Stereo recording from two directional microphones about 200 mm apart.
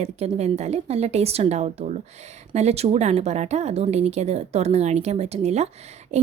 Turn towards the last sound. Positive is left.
turn(degrees=-35)  # may be behind; listen again after turning